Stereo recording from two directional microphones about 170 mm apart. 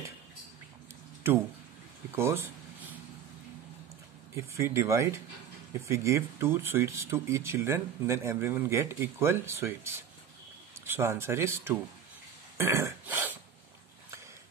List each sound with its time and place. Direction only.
2.1 s a sound: 15° right (ahead or behind)
4.4 s speech: 15° right (ahead or behind)
12.5 s throat clearing: 15° right (ahead or behind)